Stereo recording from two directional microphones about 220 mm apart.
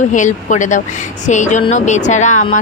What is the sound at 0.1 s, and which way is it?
Speech, 35° left (ahead or behind).